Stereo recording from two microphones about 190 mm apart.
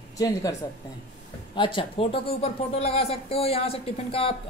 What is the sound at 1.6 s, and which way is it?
A woman's voice, 25° left (ahead or behind).